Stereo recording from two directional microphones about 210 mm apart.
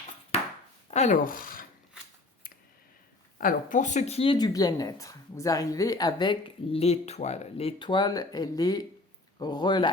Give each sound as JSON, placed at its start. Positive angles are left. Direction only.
{"t": 0.3, "sound": "chopping", "side_deg": 30}
{"t": 0.9, "sound": "speech", "side_deg": 35}
{"t": 3.3, "sound": "speech", "side_deg": 40}